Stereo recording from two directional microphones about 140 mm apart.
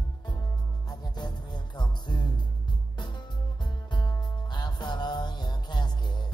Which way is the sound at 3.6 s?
30° left (ahead or behind).